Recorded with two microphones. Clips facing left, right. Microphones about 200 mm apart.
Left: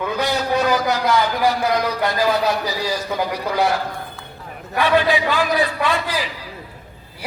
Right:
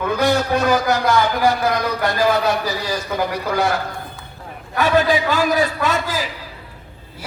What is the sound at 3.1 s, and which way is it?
Speech, 15° left (ahead or behind).